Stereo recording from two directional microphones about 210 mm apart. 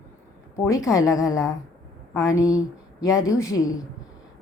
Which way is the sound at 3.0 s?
15° left (ahead or behind).